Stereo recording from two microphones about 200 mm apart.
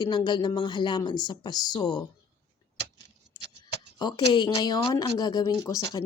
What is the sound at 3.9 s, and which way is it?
Speech, 20° left (ahead or behind).